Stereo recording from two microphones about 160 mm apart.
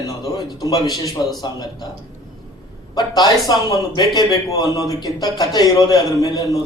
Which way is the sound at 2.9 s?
25° left (ahead or behind).